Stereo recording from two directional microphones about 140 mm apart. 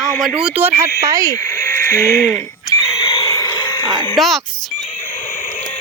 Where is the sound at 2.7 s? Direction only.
25° left (ahead or behind).